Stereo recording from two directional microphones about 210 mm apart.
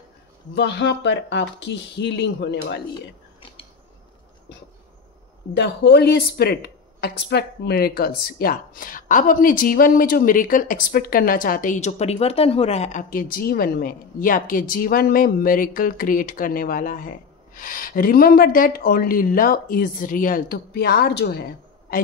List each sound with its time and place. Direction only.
0.6 s speech: 55° left (ahead or behind)
5.6 s speech: 50° left (ahead or behind)